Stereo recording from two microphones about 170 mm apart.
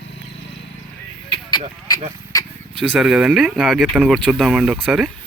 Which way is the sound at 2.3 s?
20° left (ahead or behind).